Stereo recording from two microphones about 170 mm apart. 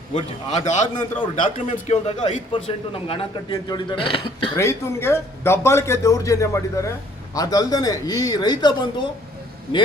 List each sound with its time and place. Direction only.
0.1 s a man's voice: 40° left (ahead or behind)
1.2 s a man's voice: 30° left (ahead or behind)
4.5 s a man's voice: 15° left (ahead or behind)